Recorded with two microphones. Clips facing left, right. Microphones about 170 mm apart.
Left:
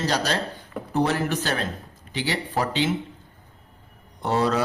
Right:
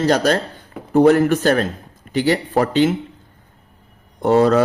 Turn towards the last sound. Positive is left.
turn(degrees=-50)  # may be behind; listen again after turning